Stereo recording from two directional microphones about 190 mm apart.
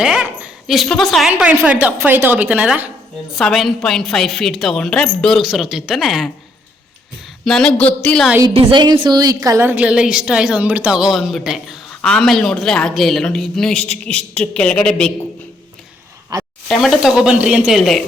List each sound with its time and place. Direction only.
0.0 s a woman's voice: 5° right (ahead or behind)
7.4 s a woman's voice: 5° left (ahead or behind)
8.4 s a woman's voice: 25° right (ahead or behind); by 15.1 s 5° left (ahead or behind)
16.3 s a sound: 15° right (ahead or behind)
16.6 s a woman's voice: centre (ahead or behind)